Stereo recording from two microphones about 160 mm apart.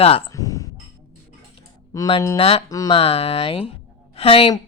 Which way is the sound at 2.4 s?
40° left (ahead or behind).